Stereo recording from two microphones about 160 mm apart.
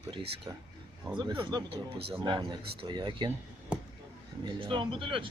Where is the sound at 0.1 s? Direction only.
30° right (ahead or behind).